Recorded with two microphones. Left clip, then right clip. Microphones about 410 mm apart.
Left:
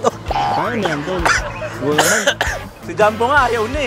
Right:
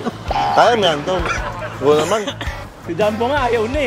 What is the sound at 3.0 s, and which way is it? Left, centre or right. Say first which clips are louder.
Speech: left 4 dB; left.